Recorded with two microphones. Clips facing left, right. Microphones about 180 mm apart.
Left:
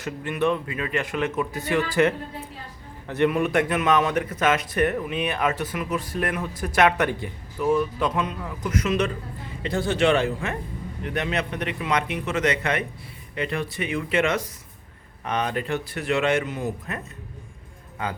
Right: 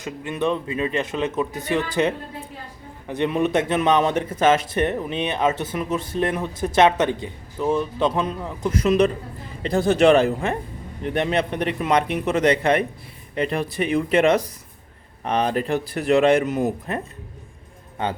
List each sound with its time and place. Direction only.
0.0 s a man's voice: 20° right (ahead or behind)